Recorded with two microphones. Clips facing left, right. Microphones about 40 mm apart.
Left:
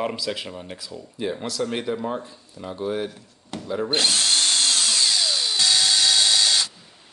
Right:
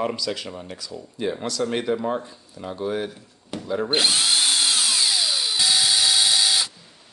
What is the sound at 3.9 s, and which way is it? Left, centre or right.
Drill, centre.